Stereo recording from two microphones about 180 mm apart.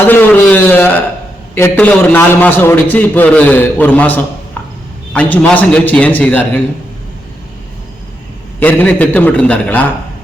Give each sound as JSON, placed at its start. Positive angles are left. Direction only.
{"t": 0.1, "sound": "a sound", "side_deg": 10}
{"t": 1.5, "sound": "a man's voice", "side_deg": 10}
{"t": 8.5, "sound": "a man's voice", "side_deg": 10}